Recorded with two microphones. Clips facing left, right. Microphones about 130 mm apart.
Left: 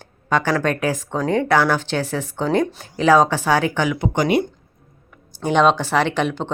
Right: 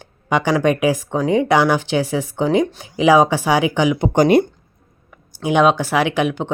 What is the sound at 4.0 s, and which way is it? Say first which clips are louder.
Speech: right 6 dB; 35° right (ahead or behind).